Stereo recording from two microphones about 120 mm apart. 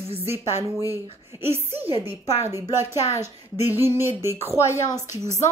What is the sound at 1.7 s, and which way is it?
Speech, 50° right (ahead or behind).